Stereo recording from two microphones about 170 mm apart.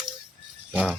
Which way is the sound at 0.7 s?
5° left (ahead or behind).